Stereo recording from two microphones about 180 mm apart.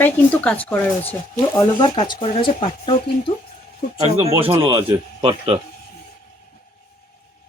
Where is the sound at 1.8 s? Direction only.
25° left (ahead or behind).